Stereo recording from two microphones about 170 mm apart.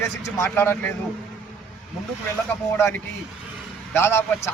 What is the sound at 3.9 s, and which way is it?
Speech, 15° left (ahead or behind).